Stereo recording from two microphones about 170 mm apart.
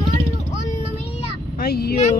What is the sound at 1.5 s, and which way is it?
Speech, 65° left (ahead or behind).